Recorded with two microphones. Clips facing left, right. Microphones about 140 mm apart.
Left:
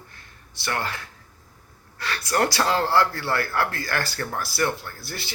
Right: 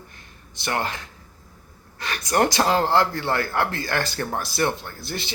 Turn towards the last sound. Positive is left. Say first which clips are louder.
# right 4 dB
turn(degrees=-20)  # may be behind; listen again after turning